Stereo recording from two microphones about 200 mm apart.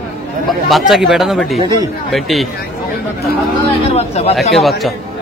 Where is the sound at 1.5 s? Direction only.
20° right (ahead or behind).